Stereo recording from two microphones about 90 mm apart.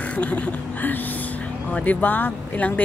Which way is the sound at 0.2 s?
15° left (ahead or behind).